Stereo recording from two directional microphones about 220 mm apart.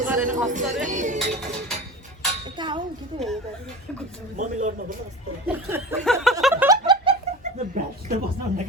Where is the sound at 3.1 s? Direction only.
20° right (ahead or behind).